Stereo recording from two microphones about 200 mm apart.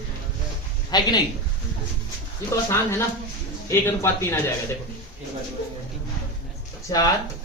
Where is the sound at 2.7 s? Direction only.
15° left (ahead or behind).